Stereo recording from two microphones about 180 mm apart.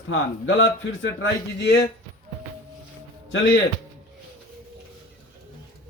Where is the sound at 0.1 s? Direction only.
90° left; by 1.8 s 70° left (ahead or behind).